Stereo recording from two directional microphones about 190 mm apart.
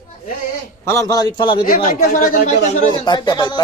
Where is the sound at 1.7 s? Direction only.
45° left (ahead or behind).